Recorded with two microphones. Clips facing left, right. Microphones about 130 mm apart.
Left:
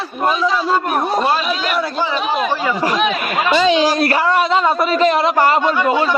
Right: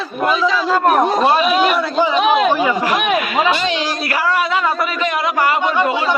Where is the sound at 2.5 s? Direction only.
15° right (ahead or behind).